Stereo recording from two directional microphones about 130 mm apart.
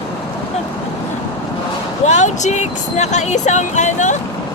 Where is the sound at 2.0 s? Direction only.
65° left (ahead or behind).